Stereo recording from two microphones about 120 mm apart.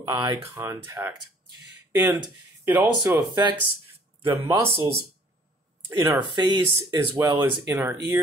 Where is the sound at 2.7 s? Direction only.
30° right (ahead or behind).